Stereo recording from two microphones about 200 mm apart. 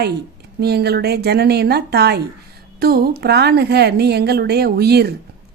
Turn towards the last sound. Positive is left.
turn(degrees=-55)  # may be behind; listen again after turning